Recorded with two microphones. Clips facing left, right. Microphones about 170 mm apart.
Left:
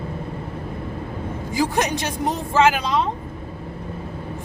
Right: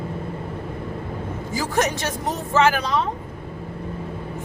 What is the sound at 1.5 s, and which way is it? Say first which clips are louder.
Speech: left 1 dB; 15° left (ahead or behind).